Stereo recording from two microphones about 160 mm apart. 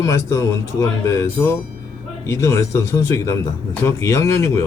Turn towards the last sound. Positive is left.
turn(degrees=15)  # may be behind; listen again after turning